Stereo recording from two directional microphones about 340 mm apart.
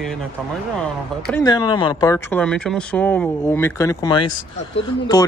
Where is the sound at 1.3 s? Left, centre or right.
Centre.